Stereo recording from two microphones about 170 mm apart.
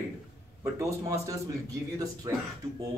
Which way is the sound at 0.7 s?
20° right (ahead or behind).